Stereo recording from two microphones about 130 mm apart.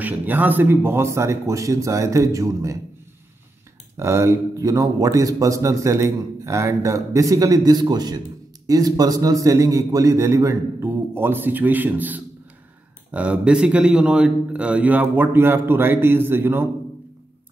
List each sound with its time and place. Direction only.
0.0 s a man's voice: 15° right (ahead or behind)
3.9 s a man's voice: 20° right (ahead or behind)